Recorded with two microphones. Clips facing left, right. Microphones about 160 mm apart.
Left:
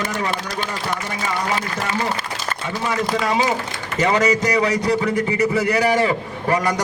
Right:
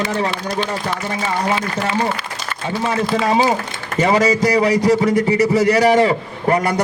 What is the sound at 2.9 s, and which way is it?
A man's voice, 30° right (ahead or behind).